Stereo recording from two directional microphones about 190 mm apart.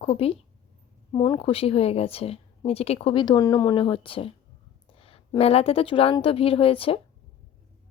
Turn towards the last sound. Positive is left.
turn(degrees=30)  # may be behind; listen again after turning